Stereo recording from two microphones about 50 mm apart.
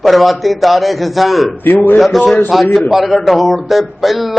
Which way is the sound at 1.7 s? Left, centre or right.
Left.